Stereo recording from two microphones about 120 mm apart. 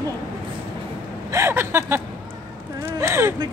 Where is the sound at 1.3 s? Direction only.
20° right (ahead or behind).